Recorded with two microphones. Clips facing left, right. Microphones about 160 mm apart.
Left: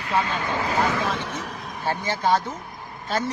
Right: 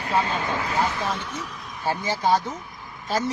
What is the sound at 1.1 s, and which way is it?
Speech, 80° left.